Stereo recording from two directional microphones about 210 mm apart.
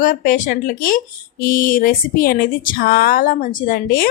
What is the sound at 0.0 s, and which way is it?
A woman's voice, 40° left (ahead or behind).